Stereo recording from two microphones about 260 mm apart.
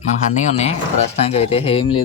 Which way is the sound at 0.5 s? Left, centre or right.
Left.